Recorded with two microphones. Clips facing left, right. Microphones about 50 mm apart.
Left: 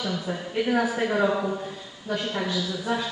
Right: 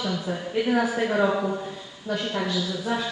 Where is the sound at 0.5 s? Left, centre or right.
Centre.